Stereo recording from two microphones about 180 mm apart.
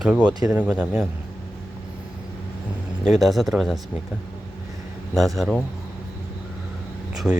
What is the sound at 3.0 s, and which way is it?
Speech, centre (ahead or behind).